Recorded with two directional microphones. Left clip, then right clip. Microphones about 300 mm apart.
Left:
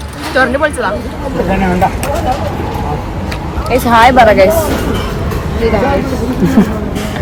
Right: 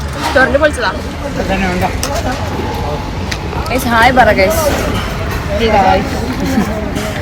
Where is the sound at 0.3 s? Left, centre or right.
Left.